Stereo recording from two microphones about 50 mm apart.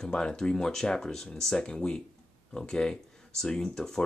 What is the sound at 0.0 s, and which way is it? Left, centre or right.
Speech, centre.